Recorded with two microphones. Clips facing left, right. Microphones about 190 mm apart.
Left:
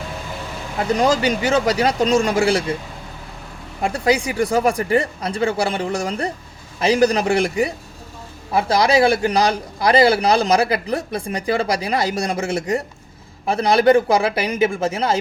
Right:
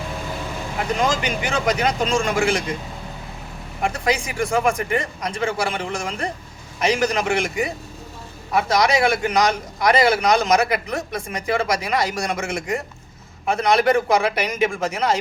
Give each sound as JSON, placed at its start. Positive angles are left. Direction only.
{"t": 0.9, "sound": "a man's voice", "side_deg": 40}
{"t": 3.8, "sound": "a man's voice", "side_deg": 30}